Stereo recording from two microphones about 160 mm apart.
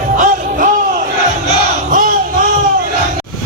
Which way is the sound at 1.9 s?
55° right (ahead or behind).